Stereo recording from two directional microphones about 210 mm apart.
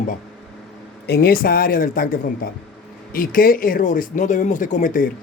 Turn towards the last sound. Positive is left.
turn(degrees=40)  # may be behind; listen again after turning